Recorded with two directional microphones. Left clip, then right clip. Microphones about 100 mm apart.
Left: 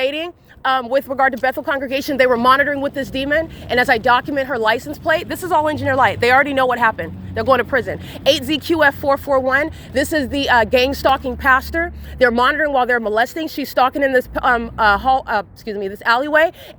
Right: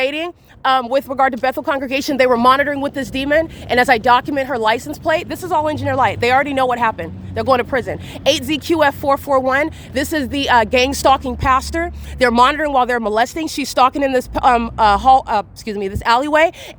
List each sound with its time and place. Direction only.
0.0 s a sound: 60° right (ahead or behind)
0.9 s a woman's voice: 45° right (ahead or behind)
1.3 s speech: 75° right (ahead or behind); by 4.4 s 50° right (ahead or behind)
4.4 s speech: 40° right (ahead or behind)
5.3 s speech: centre (ahead or behind); by 9.4 s 40° right (ahead or behind)
9.4 s speech: 60° right (ahead or behind)
9.9 s a woman's voice: 35° right (ahead or behind)
15.6 s a woman's voice: 50° right (ahead or behind)